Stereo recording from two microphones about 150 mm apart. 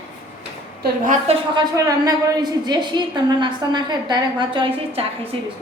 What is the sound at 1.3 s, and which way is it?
Speech, 45° right (ahead or behind).